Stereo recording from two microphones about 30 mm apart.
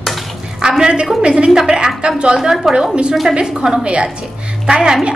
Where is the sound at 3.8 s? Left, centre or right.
Right.